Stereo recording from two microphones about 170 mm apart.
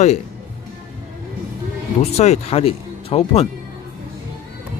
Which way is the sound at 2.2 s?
35° left (ahead or behind).